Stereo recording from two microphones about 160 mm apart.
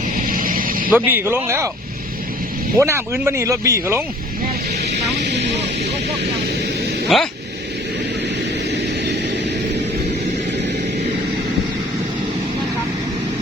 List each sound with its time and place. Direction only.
0.2 s vehicle: 60° right (ahead or behind)
0.9 s speech: 10° right (ahead or behind)
2.7 s speech: 15° right (ahead or behind)
4.8 s music: 90° right
7.1 s speech: centre (ahead or behind)